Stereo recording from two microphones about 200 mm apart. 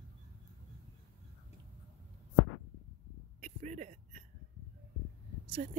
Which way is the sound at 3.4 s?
35° right (ahead or behind).